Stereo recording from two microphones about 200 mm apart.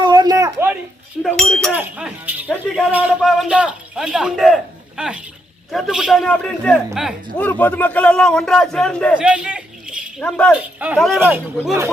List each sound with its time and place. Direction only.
0.0 s a sound: 20° right (ahead or behind)
1.2 s chink: 5° left (ahead or behind)
1.7 s a man's voice: 5° right (ahead or behind)
7.3 s a man's voice: 10° left (ahead or behind)
9.2 s a sound: 5° right (ahead or behind)
10.2 s a man's voice: 5° left (ahead or behind)
10.5 s a man's voice: 5° right (ahead or behind)